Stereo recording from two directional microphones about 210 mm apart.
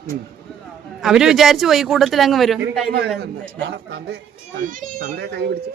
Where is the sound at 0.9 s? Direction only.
5° right (ahead or behind).